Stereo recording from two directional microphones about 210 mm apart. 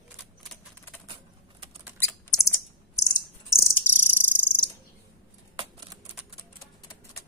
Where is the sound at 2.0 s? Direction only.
10° left (ahead or behind).